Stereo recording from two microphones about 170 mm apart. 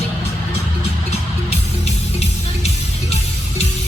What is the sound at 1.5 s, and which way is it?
Music, 40° left (ahead or behind).